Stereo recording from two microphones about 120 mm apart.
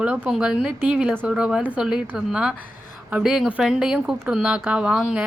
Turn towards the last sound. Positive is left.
turn(degrees=-5)  # may be behind; listen again after turning